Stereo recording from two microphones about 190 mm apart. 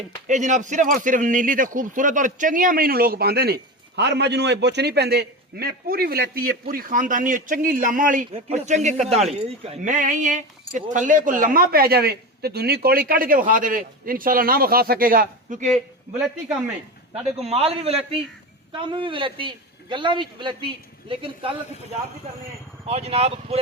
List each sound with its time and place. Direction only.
0.3 s speech: 40° right (ahead or behind)
8.3 s speech: 30° right (ahead or behind)
17.4 s a man's voice: 30° right (ahead or behind)
22.9 s speech: 30° right (ahead or behind)